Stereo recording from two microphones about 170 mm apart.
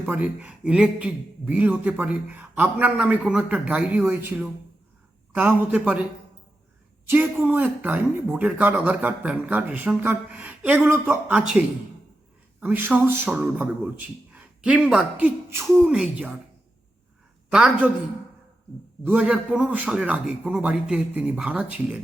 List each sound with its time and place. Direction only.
0.0 s speech: 10° right (ahead or behind)
7.1 s speech: 10° right (ahead or behind)
15.6 s speech: centre (ahead or behind)
17.5 s speech: 5° right (ahead or behind)
19.0 s speech: 10° right (ahead or behind)